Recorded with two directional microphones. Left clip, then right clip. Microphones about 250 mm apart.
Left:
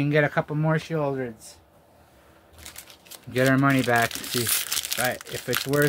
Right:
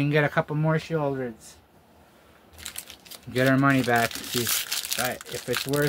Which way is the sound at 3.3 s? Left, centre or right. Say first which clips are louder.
Even; centre.